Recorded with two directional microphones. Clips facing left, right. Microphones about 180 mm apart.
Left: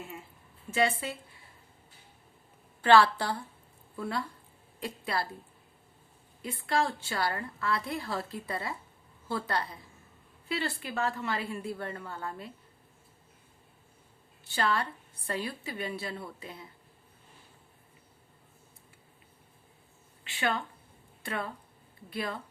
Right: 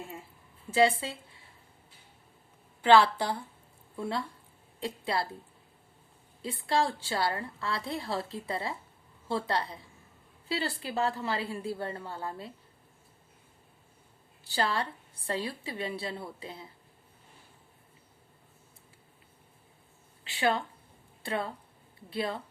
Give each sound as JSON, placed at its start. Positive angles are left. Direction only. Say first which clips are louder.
{"t": 0.7, "sound": "a woman's voice", "louder": "right 4 dB", "side_deg": -30}
{"t": 2.8, "sound": "a woman's voice", "louder": "even", "side_deg": -20}
{"t": 6.4, "sound": "a woman's voice", "louder": "right 1 dB", "side_deg": -30}
{"t": 14.4, "sound": "a woman's voice", "louder": "even", "side_deg": -30}
{"t": 20.2, "sound": "a sound", "louder": "right 3 dB", "side_deg": -35}
{"t": 21.2, "sound": "a woman's voice", "louder": "right 3 dB", "side_deg": -30}